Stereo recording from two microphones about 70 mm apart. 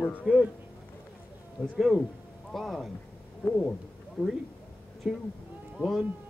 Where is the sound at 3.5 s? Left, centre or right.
Centre.